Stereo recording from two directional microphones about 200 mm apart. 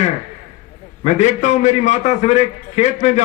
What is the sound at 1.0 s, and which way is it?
A man's voice, 35° left (ahead or behind).